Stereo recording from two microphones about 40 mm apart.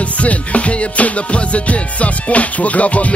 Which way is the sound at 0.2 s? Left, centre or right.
Left.